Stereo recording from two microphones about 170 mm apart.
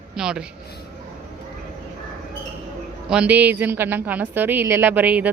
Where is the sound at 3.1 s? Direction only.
10° right (ahead or behind).